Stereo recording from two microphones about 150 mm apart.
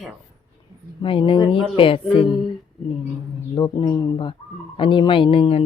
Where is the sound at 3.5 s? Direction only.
30° left (ahead or behind).